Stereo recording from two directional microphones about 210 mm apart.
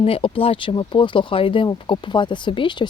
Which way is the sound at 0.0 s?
25° left (ahead or behind).